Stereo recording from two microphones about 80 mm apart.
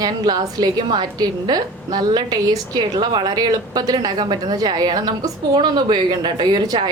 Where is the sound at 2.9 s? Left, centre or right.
Right.